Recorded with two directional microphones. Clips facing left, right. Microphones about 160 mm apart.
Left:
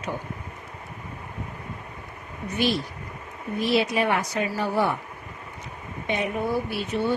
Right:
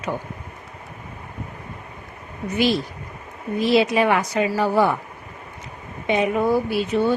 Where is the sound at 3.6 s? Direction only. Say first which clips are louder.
Right 5 dB; 90° right.